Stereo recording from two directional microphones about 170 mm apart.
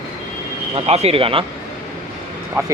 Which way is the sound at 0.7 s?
35° right (ahead or behind).